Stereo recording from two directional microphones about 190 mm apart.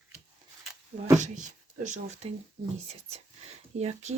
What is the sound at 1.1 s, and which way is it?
Speech, 40° right (ahead or behind).